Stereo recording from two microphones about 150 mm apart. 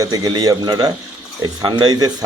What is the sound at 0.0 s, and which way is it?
Speech, 25° right (ahead or behind).